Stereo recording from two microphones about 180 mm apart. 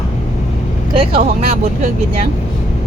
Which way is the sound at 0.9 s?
30° right (ahead or behind).